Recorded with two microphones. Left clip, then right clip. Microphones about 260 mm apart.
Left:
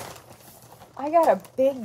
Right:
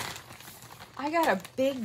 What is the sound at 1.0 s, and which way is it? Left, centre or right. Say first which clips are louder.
Speech: left 7 dB; centre.